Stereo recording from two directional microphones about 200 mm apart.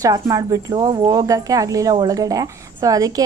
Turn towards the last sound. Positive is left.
turn(degrees=-15)  # may be behind; listen again after turning